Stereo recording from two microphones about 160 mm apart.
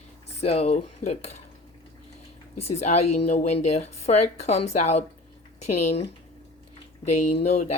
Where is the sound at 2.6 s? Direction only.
45° left (ahead or behind).